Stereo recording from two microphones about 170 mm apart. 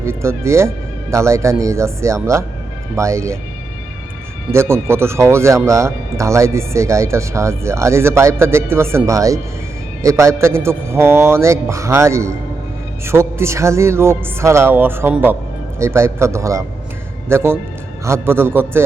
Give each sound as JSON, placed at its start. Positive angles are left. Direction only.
{"t": 0.0, "sound": "speech", "side_deg": -15}
{"t": 4.5, "sound": "speech", "side_deg": -15}